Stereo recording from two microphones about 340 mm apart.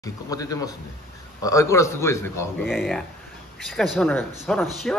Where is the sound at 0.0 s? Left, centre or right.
Centre.